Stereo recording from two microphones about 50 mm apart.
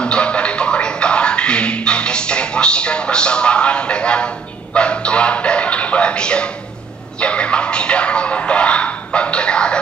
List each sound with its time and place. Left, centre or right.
0.0 s music: left